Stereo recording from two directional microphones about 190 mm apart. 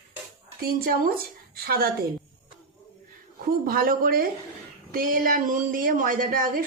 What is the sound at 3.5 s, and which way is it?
Speech, 50° right (ahead or behind).